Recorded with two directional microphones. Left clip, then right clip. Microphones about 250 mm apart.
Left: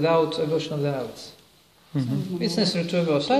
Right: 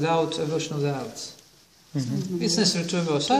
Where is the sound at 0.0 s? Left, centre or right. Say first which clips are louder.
Left 3 dB; centre.